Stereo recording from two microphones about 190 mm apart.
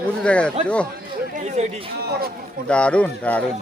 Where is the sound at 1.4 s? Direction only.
35° right (ahead or behind).